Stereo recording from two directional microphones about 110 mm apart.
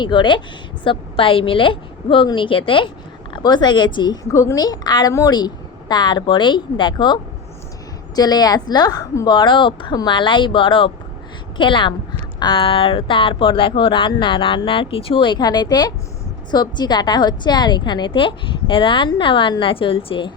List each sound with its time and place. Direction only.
0.0 s a woman's voice: 45° left (ahead or behind)
3.3 s a woman's voice: 40° left (ahead or behind)